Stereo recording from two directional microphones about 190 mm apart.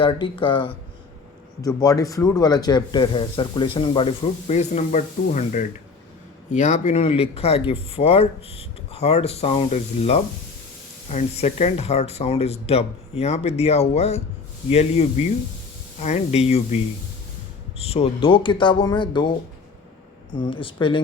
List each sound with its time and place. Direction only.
0.0 s speech: 25° left (ahead or behind)
20.3 s speech: 25° left (ahead or behind)